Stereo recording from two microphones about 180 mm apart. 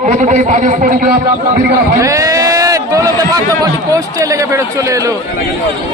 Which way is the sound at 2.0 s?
20° right (ahead or behind).